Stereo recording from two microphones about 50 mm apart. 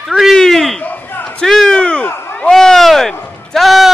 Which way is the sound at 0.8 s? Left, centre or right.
Left.